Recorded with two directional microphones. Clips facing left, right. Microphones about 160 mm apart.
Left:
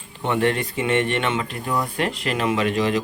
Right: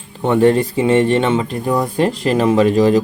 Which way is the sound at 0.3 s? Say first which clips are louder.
Right 9 dB; 35° right (ahead or behind).